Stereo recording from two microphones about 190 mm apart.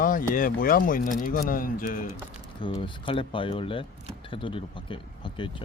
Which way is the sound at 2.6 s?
25° left (ahead or behind).